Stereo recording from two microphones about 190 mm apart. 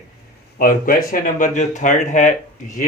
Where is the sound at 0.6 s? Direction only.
50° left (ahead or behind).